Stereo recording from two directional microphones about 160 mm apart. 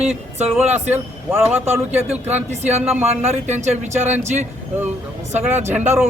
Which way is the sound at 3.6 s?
45° right (ahead or behind).